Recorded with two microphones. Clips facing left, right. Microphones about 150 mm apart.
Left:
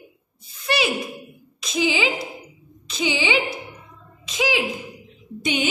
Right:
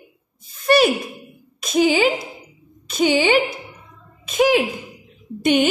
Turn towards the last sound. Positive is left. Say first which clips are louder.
# right 7 dB
turn(degrees=-50)  # may be behind; listen again after turning